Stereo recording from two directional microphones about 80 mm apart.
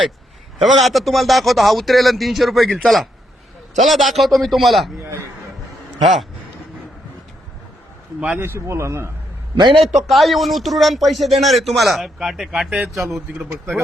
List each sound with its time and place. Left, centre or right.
0.6 s speech: centre
6.0 s speech: centre
8.4 s speech: right
9.6 s a man's voice: right
9.9 s a man's voice: centre